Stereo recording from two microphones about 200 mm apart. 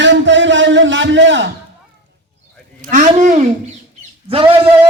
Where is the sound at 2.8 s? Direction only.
40° right (ahead or behind).